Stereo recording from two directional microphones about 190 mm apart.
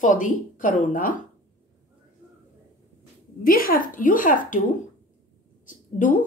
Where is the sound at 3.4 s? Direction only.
50° left (ahead or behind).